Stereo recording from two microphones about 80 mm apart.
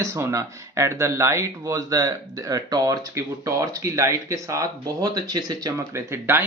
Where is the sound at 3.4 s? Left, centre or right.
Right.